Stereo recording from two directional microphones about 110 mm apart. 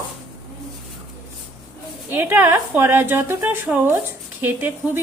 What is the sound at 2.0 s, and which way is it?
A woman's voice, 20° right (ahead or behind).